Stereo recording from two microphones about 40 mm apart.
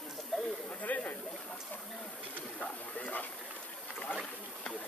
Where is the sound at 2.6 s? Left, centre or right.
Left.